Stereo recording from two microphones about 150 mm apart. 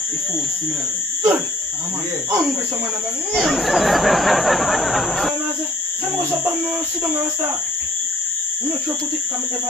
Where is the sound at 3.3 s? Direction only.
Centre (ahead or behind).